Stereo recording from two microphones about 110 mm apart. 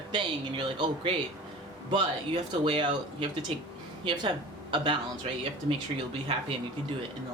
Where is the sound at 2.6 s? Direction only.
50° right (ahead or behind).